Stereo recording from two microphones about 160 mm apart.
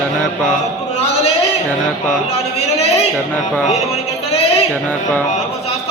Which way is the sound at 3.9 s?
40° left (ahead or behind).